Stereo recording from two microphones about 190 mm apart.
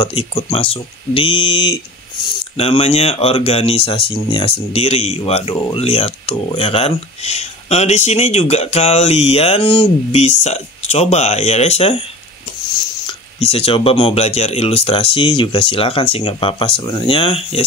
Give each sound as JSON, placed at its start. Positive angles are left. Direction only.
{"t": 0.0, "sound": "speech", "side_deg": 25}
{"t": 13.0, "sound": "speech", "side_deg": 30}